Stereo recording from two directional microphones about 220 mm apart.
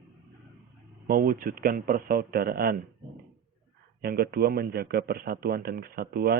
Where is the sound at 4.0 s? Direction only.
45° right (ahead or behind).